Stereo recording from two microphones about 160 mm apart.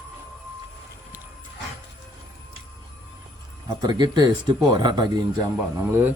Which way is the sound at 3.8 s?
25° right (ahead or behind).